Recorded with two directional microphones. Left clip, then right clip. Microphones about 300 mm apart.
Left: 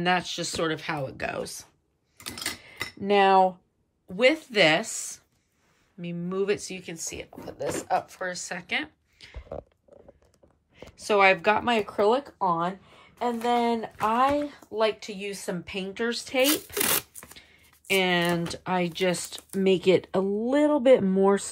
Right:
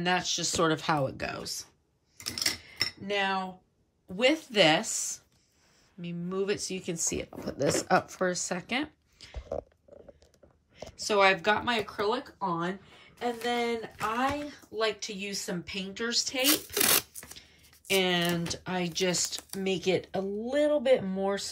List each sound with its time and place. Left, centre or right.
0.0 s speech: centre
2.1 s a sound: centre
4.1 s speech: centre
10.8 s speech: centre
11.9 s speech: left